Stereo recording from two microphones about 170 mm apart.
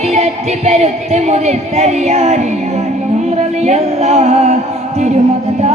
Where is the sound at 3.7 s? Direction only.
40° right (ahead or behind).